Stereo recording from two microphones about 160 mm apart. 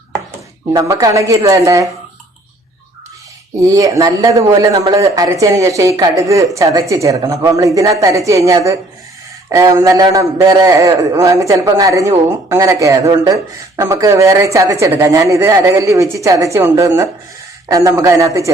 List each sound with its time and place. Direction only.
0.7 s a man's voice: 20° right (ahead or behind)
3.7 s a man's voice: 20° right (ahead or behind)